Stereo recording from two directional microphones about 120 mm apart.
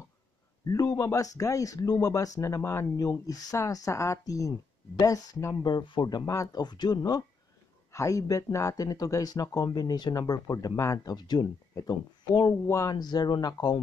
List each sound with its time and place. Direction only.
0.7 s speech: 30° left (ahead or behind)